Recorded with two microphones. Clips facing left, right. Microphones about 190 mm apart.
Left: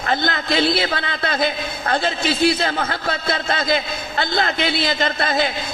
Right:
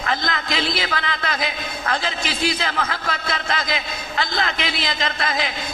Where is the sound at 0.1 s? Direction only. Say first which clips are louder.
Left 4 dB; 35° left (ahead or behind).